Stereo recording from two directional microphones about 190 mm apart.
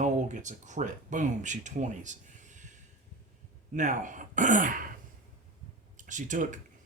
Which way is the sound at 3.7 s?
40° right (ahead or behind).